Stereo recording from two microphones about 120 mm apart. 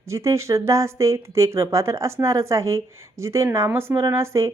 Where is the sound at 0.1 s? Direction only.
25° right (ahead or behind).